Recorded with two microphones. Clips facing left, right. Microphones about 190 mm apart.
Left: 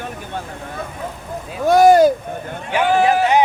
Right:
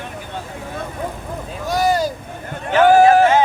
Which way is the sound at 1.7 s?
55° left (ahead or behind).